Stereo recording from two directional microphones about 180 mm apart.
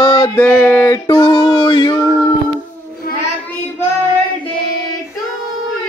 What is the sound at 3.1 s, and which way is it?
Child singing, 60° left (ahead or behind).